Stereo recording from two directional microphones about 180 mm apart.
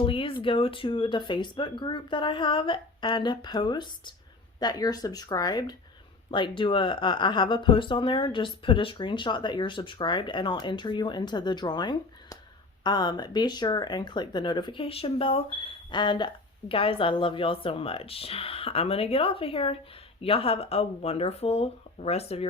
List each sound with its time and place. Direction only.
0.0 s speech: 30° left (ahead or behind)